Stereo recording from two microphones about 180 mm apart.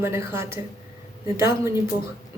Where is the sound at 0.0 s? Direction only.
15° right (ahead or behind).